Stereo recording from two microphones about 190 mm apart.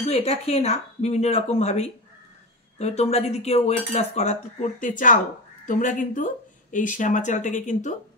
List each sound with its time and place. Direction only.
0.0 s speech: 30° left (ahead or behind)